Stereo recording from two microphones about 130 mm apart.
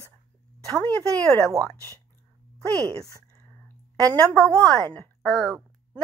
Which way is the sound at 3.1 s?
25° left (ahead or behind).